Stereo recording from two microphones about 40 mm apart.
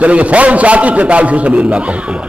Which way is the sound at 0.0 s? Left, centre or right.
Right.